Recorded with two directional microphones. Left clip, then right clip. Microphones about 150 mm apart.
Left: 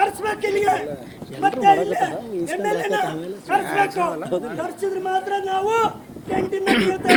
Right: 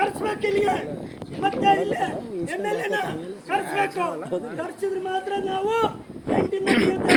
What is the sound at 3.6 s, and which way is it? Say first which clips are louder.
Speech: left 4 dB; 90° left.